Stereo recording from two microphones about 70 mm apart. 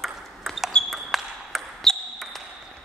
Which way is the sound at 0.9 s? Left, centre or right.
Centre.